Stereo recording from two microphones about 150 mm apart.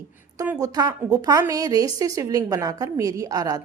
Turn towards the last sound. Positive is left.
turn(degrees=-25)  # may be behind; listen again after turning